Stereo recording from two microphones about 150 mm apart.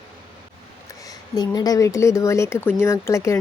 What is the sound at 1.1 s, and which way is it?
Speech, 25° left (ahead or behind).